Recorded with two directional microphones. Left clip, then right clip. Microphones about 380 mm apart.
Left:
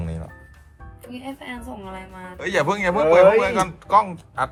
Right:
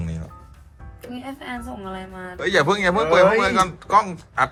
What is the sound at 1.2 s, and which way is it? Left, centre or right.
A woman's voice, right.